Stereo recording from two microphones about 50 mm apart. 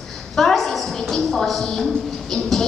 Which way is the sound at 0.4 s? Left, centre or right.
Centre.